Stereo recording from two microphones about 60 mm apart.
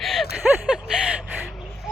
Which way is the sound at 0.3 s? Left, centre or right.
Centre.